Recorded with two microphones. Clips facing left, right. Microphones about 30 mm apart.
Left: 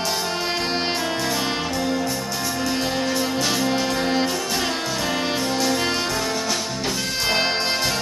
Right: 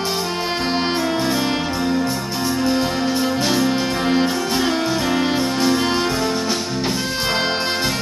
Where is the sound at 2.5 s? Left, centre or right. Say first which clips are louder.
Right 5 dB; centre.